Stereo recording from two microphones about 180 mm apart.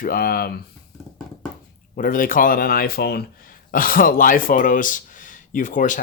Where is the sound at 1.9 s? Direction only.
50° left (ahead or behind).